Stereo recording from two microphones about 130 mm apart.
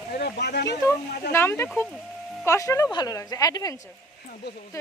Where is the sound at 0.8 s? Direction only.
20° left (ahead or behind).